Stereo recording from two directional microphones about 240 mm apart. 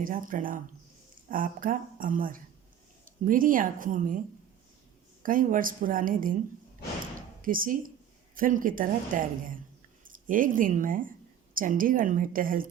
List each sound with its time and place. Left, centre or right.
0.0 s a woman's voice: right
5.2 s a woman's voice: right
7.4 s a woman's voice: right